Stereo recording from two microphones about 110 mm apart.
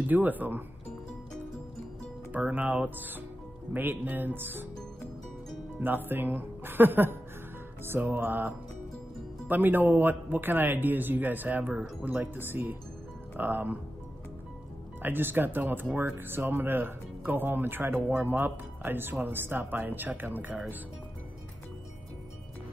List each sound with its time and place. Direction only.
0.0 s a man's voice: 15° right (ahead or behind)
2.3 s a man's voice: 15° right (ahead or behind)
5.8 s a man's voice: 20° right (ahead or behind)
15.0 s a man's voice: 20° right (ahead or behind)